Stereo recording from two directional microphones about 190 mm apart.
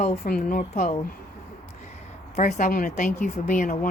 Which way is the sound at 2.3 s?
40° left (ahead or behind).